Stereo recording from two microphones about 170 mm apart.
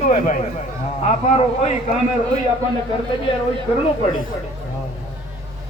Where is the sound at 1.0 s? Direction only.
35° left (ahead or behind).